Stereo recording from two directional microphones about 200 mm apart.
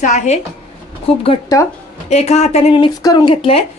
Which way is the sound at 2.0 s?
35° left (ahead or behind).